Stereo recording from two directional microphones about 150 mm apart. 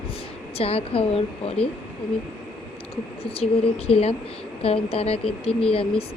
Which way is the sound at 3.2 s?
40° left (ahead or behind).